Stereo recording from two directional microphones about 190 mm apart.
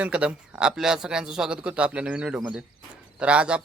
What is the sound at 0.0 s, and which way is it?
Speech, 5° right (ahead or behind).